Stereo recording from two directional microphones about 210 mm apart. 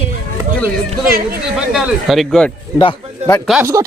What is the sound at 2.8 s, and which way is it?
Speech, 20° left (ahead or behind).